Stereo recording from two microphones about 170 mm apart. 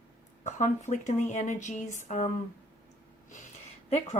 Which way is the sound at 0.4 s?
45° left (ahead or behind).